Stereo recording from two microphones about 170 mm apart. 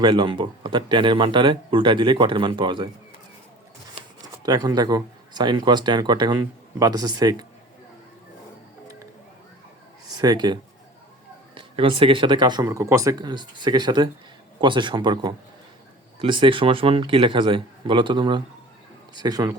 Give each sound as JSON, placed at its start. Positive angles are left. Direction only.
{"t": 0.0, "sound": "speech", "side_deg": -30}
{"t": 4.4, "sound": "speech", "side_deg": -25}
{"t": 10.2, "sound": "speech", "side_deg": -25}